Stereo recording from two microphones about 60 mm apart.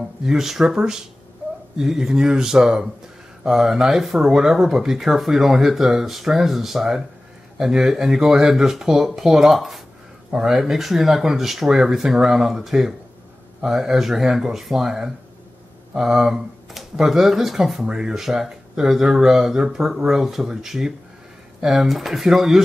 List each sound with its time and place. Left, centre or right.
0.2 s speech: centre